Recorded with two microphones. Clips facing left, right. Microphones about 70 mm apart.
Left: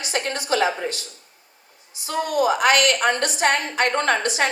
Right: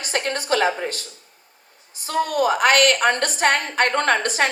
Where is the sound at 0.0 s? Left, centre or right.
Right.